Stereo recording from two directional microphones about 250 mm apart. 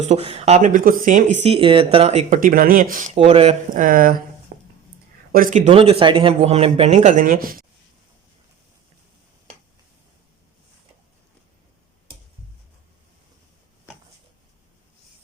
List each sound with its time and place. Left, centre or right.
0.0 s speech: right
4.5 s a sound: right
5.3 s speech: right